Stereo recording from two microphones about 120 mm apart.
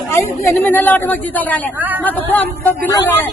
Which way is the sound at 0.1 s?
20° left (ahead or behind).